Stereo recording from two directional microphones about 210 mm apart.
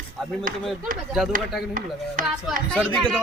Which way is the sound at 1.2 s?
Centre (ahead or behind).